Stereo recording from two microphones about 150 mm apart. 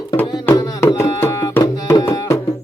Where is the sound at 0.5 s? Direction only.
20° left (ahead or behind).